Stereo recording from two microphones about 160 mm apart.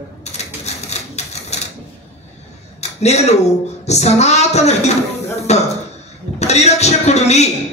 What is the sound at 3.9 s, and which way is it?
A man's voice, 45° left (ahead or behind).